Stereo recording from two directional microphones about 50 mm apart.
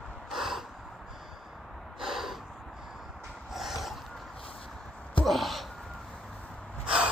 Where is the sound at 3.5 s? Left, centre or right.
Centre.